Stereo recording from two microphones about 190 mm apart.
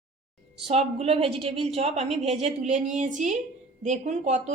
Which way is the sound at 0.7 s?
30° right (ahead or behind).